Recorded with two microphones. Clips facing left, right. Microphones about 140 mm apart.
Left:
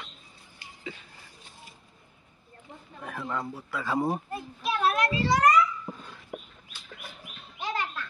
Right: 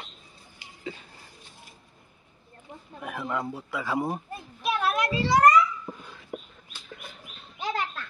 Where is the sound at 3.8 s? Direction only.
Centre (ahead or behind).